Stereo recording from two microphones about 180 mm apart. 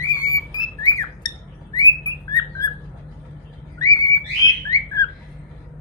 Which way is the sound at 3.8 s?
20° left (ahead or behind).